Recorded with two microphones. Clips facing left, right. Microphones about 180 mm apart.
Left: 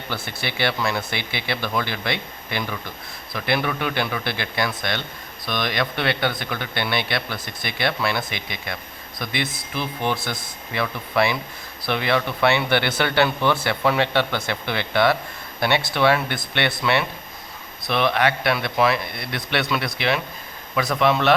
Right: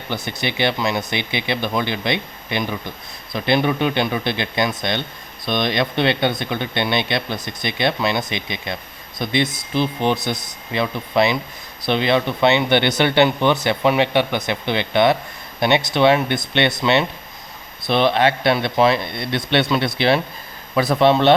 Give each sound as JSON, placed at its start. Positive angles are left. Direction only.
{"t": 0.1, "sound": "speech", "side_deg": -20}